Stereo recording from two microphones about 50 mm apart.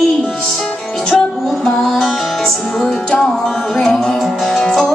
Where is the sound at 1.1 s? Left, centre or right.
Centre.